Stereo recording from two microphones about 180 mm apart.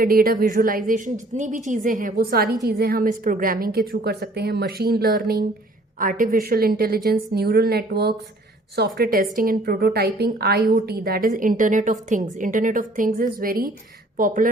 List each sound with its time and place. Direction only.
0.0 s a woman's voice: 55° right (ahead or behind)
9.0 s a woman's voice: 50° right (ahead or behind)